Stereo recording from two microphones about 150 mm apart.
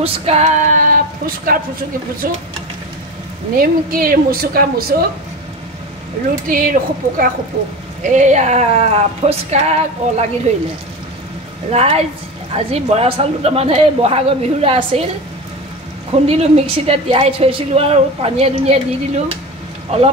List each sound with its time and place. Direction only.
0.0 s speech: 40° right (ahead or behind); by 1.6 s 70° right (ahead or behind)
3.5 s speech: 75° right (ahead or behind)
6.4 s speech: 70° right (ahead or behind)
8.0 s speech: 55° right (ahead or behind)
11.7 s a woman's voice: 40° right (ahead or behind)
16.1 s a woman's voice: 40° right (ahead or behind)